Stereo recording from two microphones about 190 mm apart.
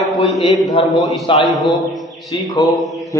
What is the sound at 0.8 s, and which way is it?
A man's voice, 30° left (ahead or behind).